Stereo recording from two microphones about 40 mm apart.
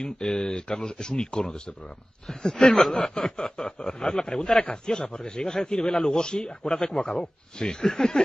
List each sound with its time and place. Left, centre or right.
0.2 s a man's voice: centre